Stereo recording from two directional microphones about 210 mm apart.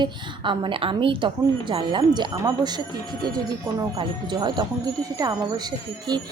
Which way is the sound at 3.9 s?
20° right (ahead or behind).